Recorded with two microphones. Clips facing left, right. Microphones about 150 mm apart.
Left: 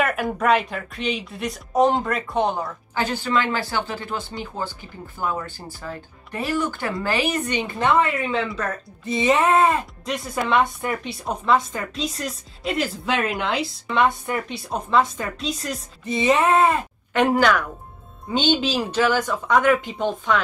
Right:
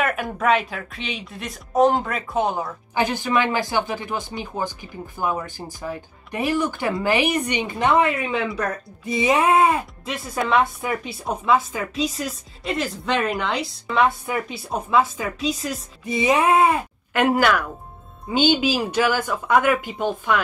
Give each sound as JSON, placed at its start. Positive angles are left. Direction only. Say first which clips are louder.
{"t": 0.0, "sound": "speech", "louder": "left 1 dB", "side_deg": 0}
{"t": 2.9, "sound": "speech", "louder": "right 2 dB", "side_deg": -15}